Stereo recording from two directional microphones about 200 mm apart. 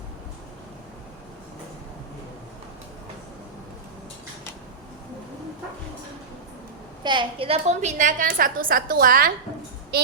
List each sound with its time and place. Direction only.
7.0 s a woman's voice: 25° right (ahead or behind); by 9.3 s 45° right (ahead or behind)